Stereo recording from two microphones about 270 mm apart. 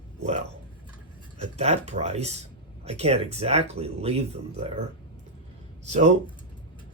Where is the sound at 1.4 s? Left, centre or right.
Right.